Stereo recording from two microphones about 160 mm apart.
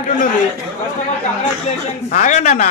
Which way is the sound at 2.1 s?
50° left (ahead or behind).